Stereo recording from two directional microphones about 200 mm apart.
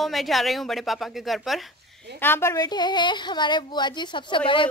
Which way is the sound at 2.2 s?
10° left (ahead or behind).